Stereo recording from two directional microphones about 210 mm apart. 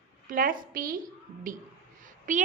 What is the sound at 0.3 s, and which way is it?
Speech, 40° right (ahead or behind).